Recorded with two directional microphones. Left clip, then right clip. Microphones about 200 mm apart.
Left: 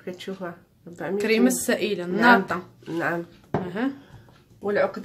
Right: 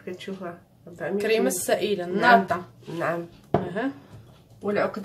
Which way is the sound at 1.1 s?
20° left (ahead or behind).